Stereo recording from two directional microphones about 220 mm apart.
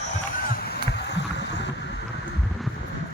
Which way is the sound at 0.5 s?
45° left (ahead or behind).